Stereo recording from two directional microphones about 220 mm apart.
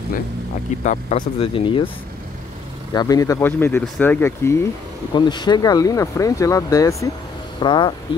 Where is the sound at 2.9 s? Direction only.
15° left (ahead or behind).